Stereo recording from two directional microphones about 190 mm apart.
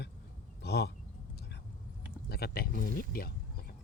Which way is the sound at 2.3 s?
55° left (ahead or behind).